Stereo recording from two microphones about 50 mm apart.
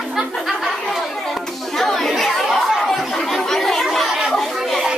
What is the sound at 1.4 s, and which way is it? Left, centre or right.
Chatter, centre.